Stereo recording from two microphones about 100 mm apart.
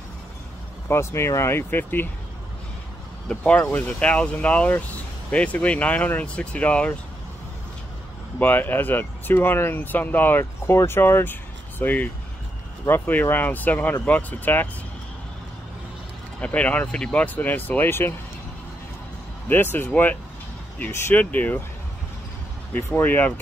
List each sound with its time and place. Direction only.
0.8 s speech: 25° left (ahead or behind)
3.3 s speech: 10° left (ahead or behind)
8.4 s speech: 20° left (ahead or behind)
16.3 s speech: 10° left (ahead or behind)
19.5 s speech: 20° left (ahead or behind)
22.9 s speech: 20° left (ahead or behind)